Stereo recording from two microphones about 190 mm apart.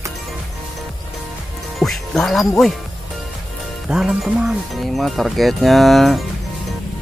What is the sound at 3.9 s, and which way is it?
Speech, 5° right (ahead or behind).